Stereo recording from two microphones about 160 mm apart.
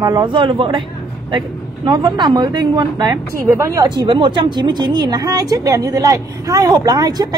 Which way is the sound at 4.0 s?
30° right (ahead or behind).